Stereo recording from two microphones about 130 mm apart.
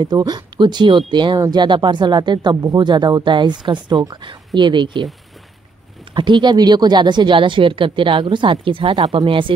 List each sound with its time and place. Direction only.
0.0 s speech: 35° right (ahead or behind)
6.1 s speech: 35° right (ahead or behind)